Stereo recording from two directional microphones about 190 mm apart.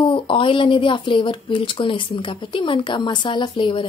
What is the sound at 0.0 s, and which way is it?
Speech, 25° left (ahead or behind).